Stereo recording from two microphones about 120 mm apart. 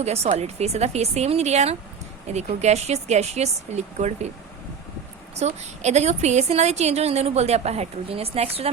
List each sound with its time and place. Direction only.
0.0 s a woman's voice: 60° right (ahead or behind)
5.3 s a woman's voice: 65° right (ahead or behind)